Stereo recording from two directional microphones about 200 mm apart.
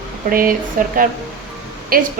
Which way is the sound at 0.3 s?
45° right (ahead or behind).